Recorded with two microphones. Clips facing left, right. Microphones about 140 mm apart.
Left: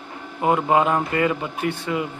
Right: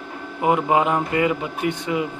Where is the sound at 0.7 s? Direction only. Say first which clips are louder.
Even; 15° right (ahead or behind).